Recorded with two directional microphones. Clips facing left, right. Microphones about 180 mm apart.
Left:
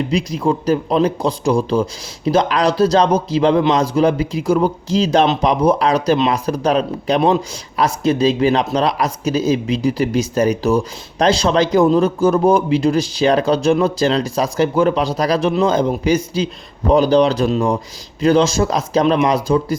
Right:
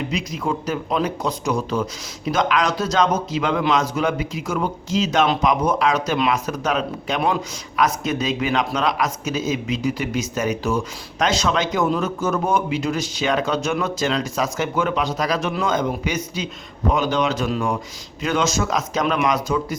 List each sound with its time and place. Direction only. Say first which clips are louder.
0.1 s speech: left 7 dB; 35° left (ahead or behind)